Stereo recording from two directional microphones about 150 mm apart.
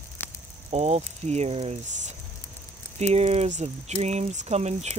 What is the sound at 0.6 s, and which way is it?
Speech, 45° right (ahead or behind).